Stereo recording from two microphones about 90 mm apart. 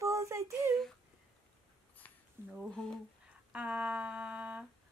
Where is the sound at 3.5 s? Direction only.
10° right (ahead or behind).